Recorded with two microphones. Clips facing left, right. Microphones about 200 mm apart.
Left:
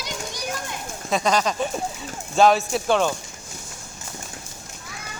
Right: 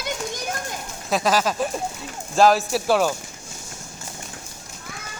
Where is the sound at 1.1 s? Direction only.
5° right (ahead or behind).